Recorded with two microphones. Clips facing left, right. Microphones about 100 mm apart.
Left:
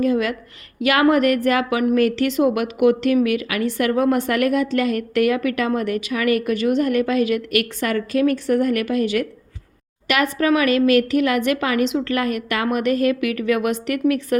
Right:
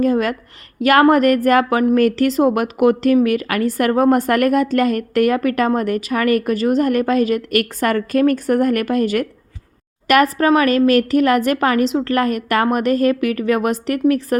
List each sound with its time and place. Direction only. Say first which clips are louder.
0.0 s a woman's voice: right 3 dB; 45° right (ahead or behind)